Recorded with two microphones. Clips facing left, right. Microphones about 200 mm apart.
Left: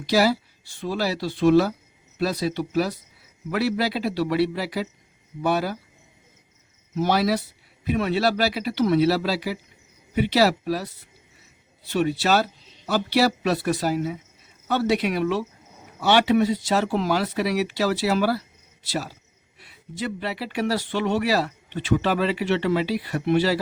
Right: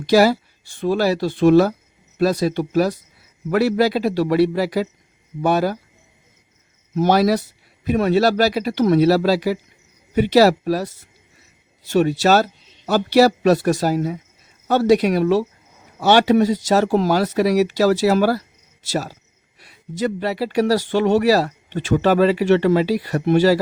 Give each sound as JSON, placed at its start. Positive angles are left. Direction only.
{"t": 0.0, "sound": "speech", "side_deg": -50}
{"t": 6.9, "sound": "speech", "side_deg": -45}